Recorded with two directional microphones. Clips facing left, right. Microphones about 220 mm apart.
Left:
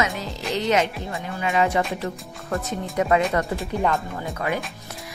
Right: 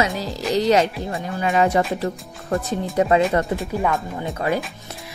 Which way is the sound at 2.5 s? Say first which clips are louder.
Right 4 dB; 30° right (ahead or behind).